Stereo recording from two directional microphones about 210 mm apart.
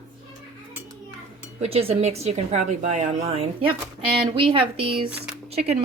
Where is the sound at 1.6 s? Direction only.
30° right (ahead or behind).